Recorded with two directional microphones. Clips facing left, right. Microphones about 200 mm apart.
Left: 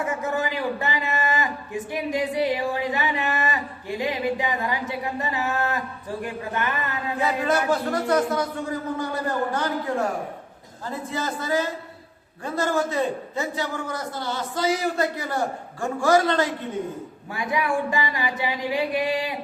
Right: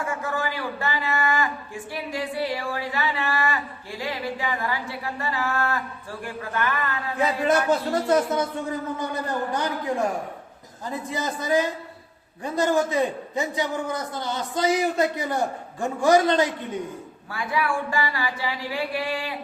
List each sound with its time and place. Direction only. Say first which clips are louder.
0.0 s a man's voice: left 2 dB; 20° left (ahead or behind)
7.2 s speech: right 2 dB; 20° right (ahead or behind)
9.5 s a man's voice: even; 15° right (ahead or behind)
11.1 s a man's voice: right 2 dB; 15° right (ahead or behind)
17.3 s a man's voice: left 1 dB; 20° left (ahead or behind)